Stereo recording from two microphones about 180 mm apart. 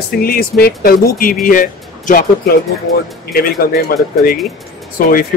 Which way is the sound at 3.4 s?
55° left (ahead or behind).